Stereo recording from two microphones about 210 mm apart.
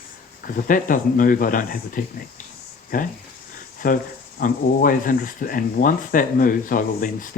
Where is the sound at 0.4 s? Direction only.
40° left (ahead or behind).